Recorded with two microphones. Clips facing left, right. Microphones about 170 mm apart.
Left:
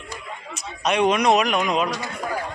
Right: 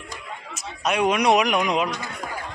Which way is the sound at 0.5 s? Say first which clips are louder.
Left 2 dB; 5° right (ahead or behind).